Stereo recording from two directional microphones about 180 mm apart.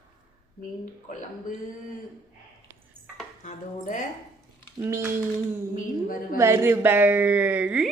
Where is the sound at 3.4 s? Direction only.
45° left (ahead or behind).